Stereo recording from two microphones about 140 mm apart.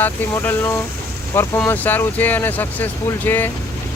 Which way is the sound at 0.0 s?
15° left (ahead or behind).